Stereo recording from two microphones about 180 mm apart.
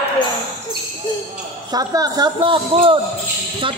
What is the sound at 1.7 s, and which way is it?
A woman's voice, 20° right (ahead or behind).